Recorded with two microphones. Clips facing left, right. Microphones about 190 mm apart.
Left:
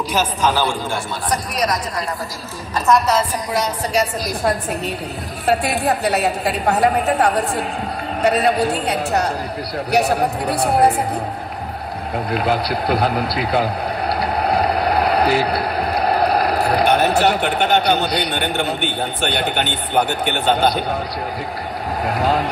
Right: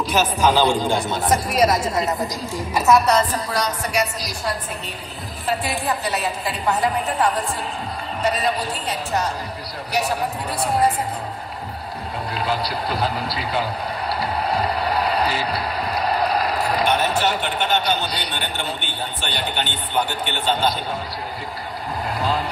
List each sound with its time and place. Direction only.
0.4 s a woman's voice: 15° right (ahead or behind)
3.5 s a woman's voice: 30° left (ahead or behind)
5.5 s a woman's voice: 65° left (ahead or behind)
12.3 s a man's voice: 60° left (ahead or behind)
22.0 s speech: 55° left (ahead or behind)